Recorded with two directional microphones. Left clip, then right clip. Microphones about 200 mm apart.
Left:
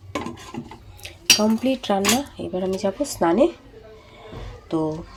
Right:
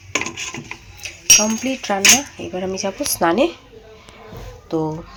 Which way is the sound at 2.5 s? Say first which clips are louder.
Even; 5° right (ahead or behind).